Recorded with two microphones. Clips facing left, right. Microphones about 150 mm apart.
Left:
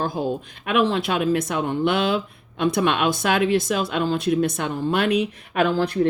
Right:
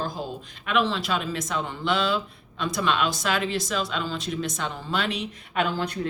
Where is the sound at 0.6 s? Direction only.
55° left (ahead or behind).